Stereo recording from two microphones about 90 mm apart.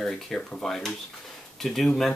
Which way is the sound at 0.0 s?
5° left (ahead or behind).